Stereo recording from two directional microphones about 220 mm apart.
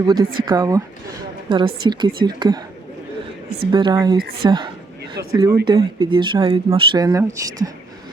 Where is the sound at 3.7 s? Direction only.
20° right (ahead or behind).